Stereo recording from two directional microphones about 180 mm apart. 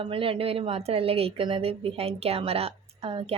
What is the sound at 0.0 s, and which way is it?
A woman's voice, 30° right (ahead or behind).